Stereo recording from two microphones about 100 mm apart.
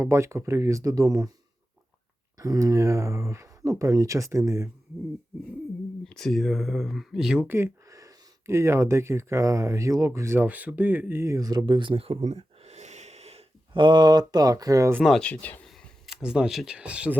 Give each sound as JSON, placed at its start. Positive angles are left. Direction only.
{"t": 0.0, "sound": "speech", "side_deg": -30}
{"t": 2.4, "sound": "speech", "side_deg": -35}
{"t": 6.1, "sound": "speech", "side_deg": 5}
{"t": 7.4, "sound": "speech", "side_deg": -25}
{"t": 7.9, "sound": "speech", "side_deg": -35}
{"t": 13.7, "sound": "speech", "side_deg": -50}
{"t": 15.0, "sound": "speech", "side_deg": 0}
{"t": 15.3, "sound": "speech", "side_deg": 15}
{"t": 15.6, "sound": "speech", "side_deg": 5}